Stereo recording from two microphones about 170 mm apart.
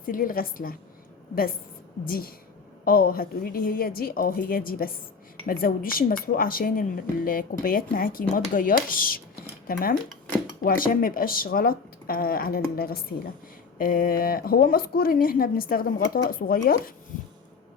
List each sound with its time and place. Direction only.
0.0 s speech: 55° left (ahead or behind)
2.0 s speech: 60° left (ahead or behind)